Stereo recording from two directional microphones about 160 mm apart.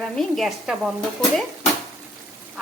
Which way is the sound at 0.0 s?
Centre (ahead or behind).